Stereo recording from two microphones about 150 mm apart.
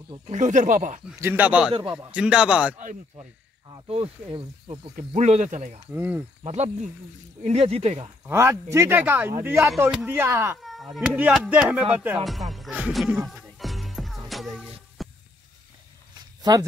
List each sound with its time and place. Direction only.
0.3 s speech: 55° right (ahead or behind)
1.2 s speech: 10° right (ahead or behind)
1.7 s speech: 35° right (ahead or behind)
2.1 s speech: 5° right (ahead or behind)
3.2 s speech: 30° right (ahead or behind)
4.9 s speech: 50° right (ahead or behind)
5.9 s speech: 10° right (ahead or behind)
6.4 s speech: 45° right (ahead or behind)
8.3 s speech: 15° right (ahead or behind)
10.6 s speech: centre (ahead or behind)
12.3 s music: centre (ahead or behind)
15.0 s a sound: centre (ahead or behind)
16.5 s speech: 25° right (ahead or behind)